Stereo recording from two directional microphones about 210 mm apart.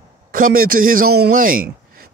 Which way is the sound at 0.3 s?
40° right (ahead or behind).